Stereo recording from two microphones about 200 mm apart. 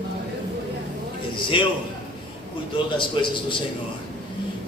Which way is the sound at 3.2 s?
25° left (ahead or behind).